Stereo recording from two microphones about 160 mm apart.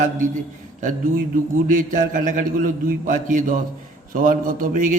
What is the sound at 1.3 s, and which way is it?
A man's voice, 60° right (ahead or behind).